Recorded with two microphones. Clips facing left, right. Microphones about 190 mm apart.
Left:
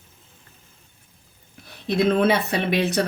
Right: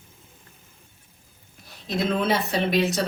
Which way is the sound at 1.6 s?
60° left (ahead or behind).